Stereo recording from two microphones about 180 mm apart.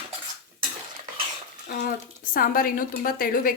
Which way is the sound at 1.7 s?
50° left (ahead or behind).